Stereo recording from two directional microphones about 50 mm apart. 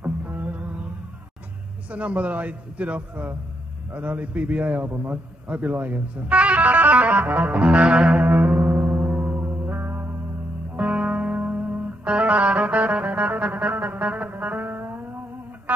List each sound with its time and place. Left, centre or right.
0.0 s music: right
1.9 s a man's voice: right
8.3 s music: right
10.8 s music: right
12.0 s music: right